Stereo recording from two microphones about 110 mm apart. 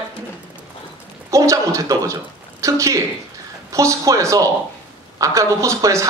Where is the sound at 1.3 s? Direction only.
30° right (ahead or behind).